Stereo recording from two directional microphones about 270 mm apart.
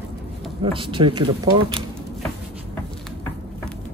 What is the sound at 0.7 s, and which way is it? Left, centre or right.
Speech, centre.